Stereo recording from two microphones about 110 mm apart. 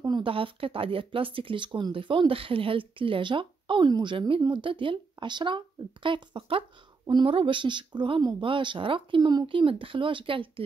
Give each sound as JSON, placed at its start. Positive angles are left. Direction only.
{"t": 0.0, "sound": "speech", "side_deg": -50}
{"t": 9.5, "sound": "speech", "side_deg": -55}